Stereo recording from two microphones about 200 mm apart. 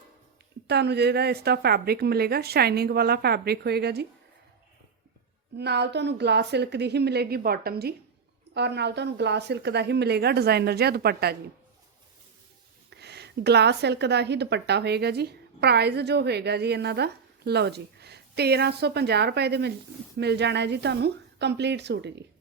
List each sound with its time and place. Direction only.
0.7 s speech: 55° right (ahead or behind)
5.5 s a woman's voice: 55° right (ahead or behind)
12.9 s a woman's voice: 55° right (ahead or behind)